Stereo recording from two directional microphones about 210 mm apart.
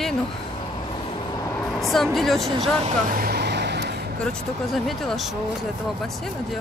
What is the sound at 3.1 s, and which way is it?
Vehicle, 45° right (ahead or behind).